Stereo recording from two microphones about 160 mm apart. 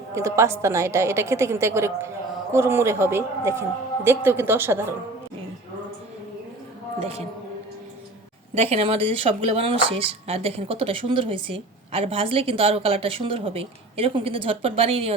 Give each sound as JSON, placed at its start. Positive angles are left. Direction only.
{"t": 0.1, "sound": "speech", "side_deg": -20}
{"t": 7.0, "sound": "a man's voice", "side_deg": -40}
{"t": 8.5, "sound": "speech", "side_deg": -40}